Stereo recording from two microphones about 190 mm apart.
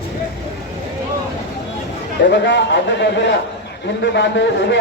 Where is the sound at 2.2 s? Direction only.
70° left (ahead or behind).